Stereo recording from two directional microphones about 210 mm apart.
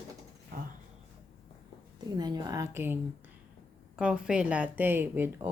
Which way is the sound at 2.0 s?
20° right (ahead or behind).